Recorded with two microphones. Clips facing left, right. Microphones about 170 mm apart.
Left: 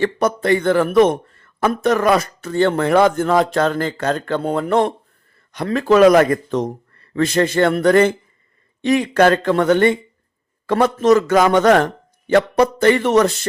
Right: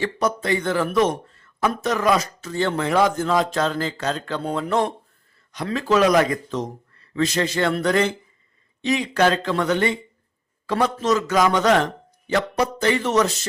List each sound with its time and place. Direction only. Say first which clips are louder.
0.0 s a man's voice: left 5 dB; 55° left (ahead or behind)